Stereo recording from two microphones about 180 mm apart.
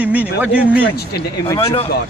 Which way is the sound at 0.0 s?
10° right (ahead or behind).